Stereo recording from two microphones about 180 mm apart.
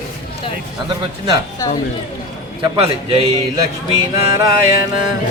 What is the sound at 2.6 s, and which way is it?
Speech, 35° right (ahead or behind).